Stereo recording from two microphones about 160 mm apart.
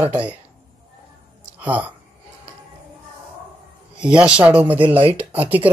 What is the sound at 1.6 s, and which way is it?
Speech, 10° right (ahead or behind).